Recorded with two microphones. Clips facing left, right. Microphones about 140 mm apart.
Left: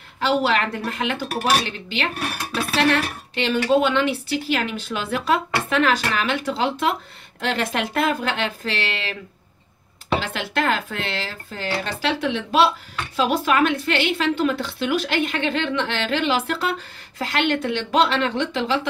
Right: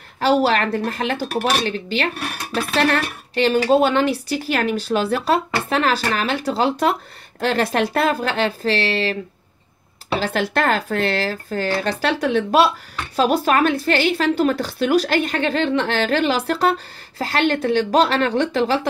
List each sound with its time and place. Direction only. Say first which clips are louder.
0.2 s speech: right 3 dB; 40° right (ahead or behind)
10.2 s speech: right 4 dB; 40° right (ahead or behind)